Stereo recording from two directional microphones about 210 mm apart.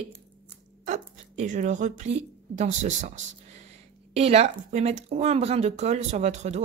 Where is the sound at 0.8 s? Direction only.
35° right (ahead or behind).